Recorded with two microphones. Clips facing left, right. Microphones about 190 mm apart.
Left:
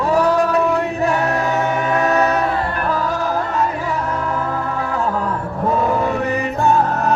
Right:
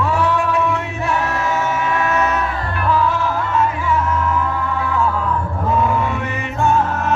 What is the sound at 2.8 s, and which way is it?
Music, 40° left (ahead or behind).